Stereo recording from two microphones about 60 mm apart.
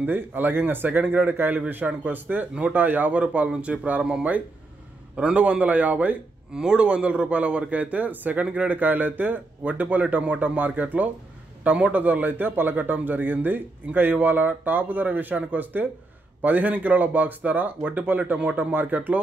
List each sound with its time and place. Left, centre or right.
0.0 s a man's voice: right
6.5 s a man's voice: centre
18.7 s a man's voice: right